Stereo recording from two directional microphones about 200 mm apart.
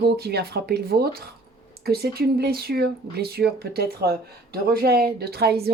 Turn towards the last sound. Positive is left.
turn(degrees=-50)  # may be behind; listen again after turning